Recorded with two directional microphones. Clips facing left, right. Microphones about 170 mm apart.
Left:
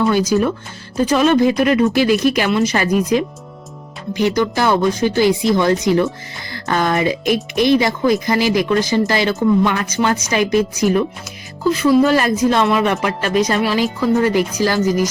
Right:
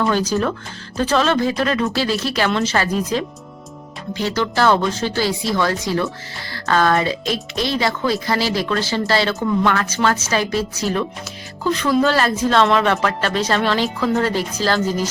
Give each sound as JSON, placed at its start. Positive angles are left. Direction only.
{"t": 0.1, "sound": "a woman's voice", "side_deg": 10}